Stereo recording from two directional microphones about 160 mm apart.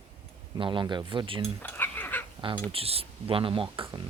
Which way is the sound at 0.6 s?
30° right (ahead or behind).